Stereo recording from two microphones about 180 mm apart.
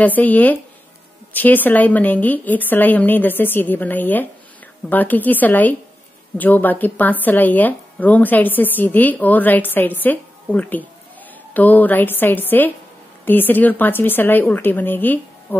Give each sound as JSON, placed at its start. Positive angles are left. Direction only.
{"t": 0.0, "sound": "speech", "side_deg": 10}